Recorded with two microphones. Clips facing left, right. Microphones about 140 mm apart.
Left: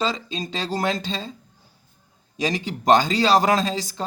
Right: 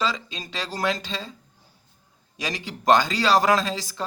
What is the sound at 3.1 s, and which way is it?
Speech, 25° left (ahead or behind).